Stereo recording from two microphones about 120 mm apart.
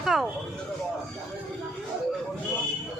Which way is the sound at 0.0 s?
Centre (ahead or behind).